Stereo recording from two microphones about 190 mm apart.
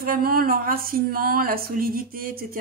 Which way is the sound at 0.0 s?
50° right (ahead or behind).